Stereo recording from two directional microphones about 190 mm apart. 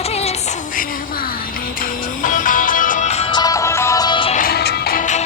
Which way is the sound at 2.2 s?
45° left (ahead or behind).